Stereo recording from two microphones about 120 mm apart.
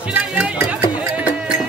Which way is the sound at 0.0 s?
10° right (ahead or behind).